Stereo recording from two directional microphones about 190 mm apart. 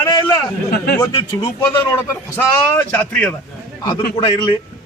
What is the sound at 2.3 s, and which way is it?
A man's voice, 10° left (ahead or behind).